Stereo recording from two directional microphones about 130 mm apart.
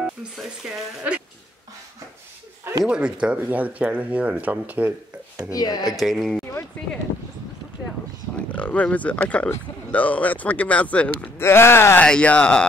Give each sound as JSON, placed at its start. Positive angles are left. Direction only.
{"t": 0.0, "sound": "speech", "side_deg": -5}
{"t": 2.8, "sound": "speech", "side_deg": -10}
{"t": 5.5, "sound": "speech", "side_deg": 30}
{"t": 5.9, "sound": "a woman's voice", "side_deg": 0}
{"t": 8.5, "sound": "speech", "side_deg": 10}